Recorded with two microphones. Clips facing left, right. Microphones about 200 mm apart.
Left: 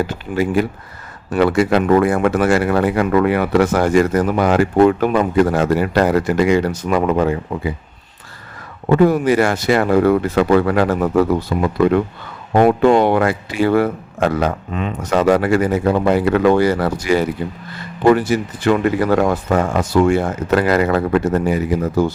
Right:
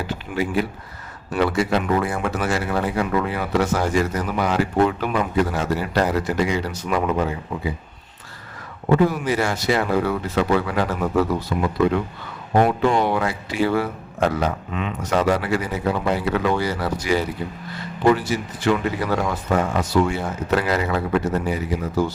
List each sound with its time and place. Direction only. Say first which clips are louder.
0.1 s speech: left 5 dB; 50° left (ahead or behind)
8.9 s speech: left 6 dB; 50° left (ahead or behind)
14.7 s speech: left 4 dB; 40° left (ahead or behind)